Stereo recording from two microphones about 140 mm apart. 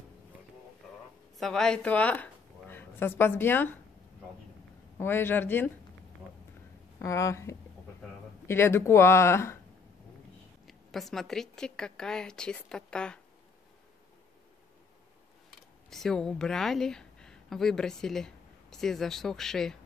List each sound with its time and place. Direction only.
1.4 s a woman's voice: 5° left (ahead or behind)
4.9 s speech: 15° left (ahead or behind)
7.0 s speech: 20° left (ahead or behind)
10.7 s a woman's voice: centre (ahead or behind)
15.9 s a woman's voice: 5° left (ahead or behind)